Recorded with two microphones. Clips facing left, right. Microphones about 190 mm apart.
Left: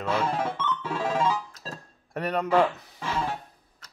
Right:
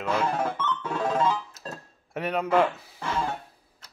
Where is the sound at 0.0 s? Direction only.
5° left (ahead or behind).